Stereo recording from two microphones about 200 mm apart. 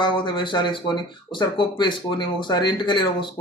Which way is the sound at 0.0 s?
25° left (ahead or behind).